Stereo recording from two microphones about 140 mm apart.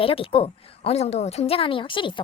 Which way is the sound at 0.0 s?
40° left (ahead or behind).